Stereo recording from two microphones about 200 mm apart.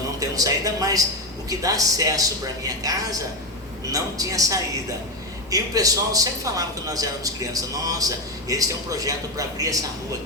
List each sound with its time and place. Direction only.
0.2 s a man's voice: 15° right (ahead or behind)